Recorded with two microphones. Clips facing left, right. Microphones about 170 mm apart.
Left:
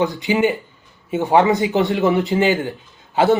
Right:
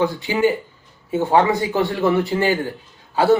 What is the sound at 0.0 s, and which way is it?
Speech, 20° left (ahead or behind).